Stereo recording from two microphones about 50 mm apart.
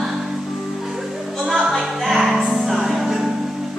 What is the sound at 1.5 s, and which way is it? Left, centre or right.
Music, centre.